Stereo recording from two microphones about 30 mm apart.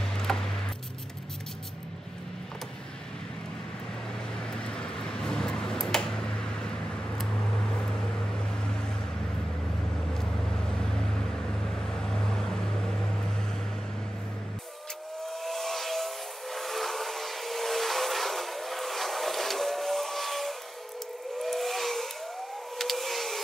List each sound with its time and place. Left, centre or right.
0.0 s coin: centre
4.4 s vehicle: left
4.9 s a sound: centre
7.2 s vehicle: centre
10.6 s vehicle: left
15.4 s steam whistle: centre
21.4 s a sound: centre